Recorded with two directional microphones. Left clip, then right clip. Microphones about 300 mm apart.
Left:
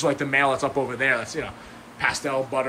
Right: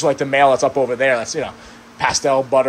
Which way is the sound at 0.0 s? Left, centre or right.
Centre.